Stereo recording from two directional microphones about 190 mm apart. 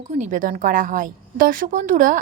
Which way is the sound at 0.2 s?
40° right (ahead or behind).